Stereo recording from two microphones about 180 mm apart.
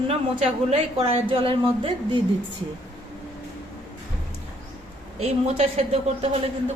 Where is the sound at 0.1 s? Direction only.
35° right (ahead or behind).